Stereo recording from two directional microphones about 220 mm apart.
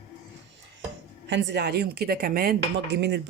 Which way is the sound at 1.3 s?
55° right (ahead or behind).